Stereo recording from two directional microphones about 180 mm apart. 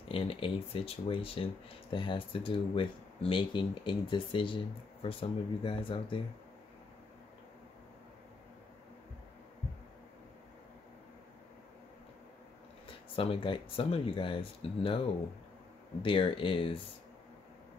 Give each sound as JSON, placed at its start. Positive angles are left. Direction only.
{"t": 0.1, "sound": "speech", "side_deg": 30}
{"t": 13.1, "sound": "speech", "side_deg": 30}
{"t": 16.0, "sound": "speech", "side_deg": 30}